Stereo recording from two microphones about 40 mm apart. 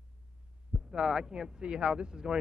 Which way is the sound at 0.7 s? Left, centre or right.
Centre.